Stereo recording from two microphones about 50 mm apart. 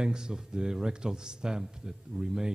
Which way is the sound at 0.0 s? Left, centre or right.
Centre.